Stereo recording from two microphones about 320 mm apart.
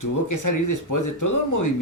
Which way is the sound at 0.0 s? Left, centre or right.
Left.